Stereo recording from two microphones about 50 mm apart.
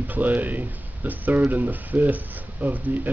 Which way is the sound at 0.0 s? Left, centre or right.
Right.